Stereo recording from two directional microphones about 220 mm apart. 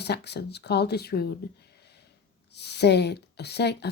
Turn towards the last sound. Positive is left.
turn(degrees=50)  # may be behind; listen again after turning